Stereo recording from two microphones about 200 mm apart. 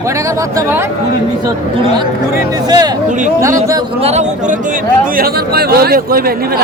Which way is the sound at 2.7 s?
20° right (ahead or behind).